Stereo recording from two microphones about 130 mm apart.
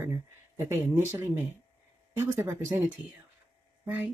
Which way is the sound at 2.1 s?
20° right (ahead or behind).